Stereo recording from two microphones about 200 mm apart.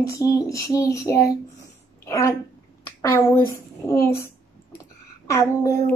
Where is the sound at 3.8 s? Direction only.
15° left (ahead or behind).